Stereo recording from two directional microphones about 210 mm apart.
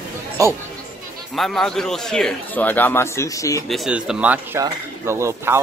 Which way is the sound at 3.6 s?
Centre (ahead or behind).